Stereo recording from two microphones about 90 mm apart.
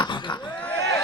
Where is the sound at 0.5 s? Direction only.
15° left (ahead or behind).